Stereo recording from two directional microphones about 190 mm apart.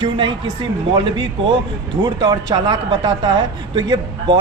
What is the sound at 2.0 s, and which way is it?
Speech, 25° right (ahead or behind).